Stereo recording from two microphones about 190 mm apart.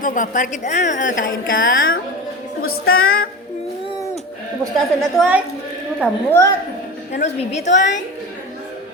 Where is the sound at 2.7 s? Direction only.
90° left.